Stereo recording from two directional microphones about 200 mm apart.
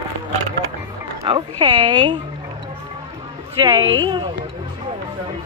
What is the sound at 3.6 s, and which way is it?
Speech, 20° right (ahead or behind).